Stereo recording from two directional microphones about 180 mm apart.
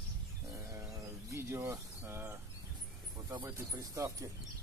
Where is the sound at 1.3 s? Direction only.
15° right (ahead or behind).